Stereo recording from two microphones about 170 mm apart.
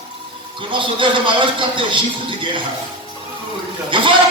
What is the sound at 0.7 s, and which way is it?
A man's voice, 30° right (ahead or behind).